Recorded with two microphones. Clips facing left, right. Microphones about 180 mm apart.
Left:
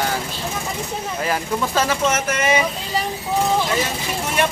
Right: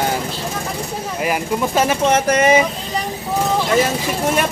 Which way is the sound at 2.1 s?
40° right (ahead or behind).